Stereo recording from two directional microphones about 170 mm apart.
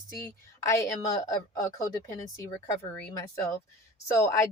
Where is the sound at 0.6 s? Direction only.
20° left (ahead or behind).